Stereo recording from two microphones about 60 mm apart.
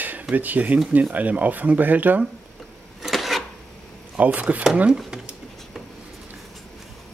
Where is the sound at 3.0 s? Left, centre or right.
Centre.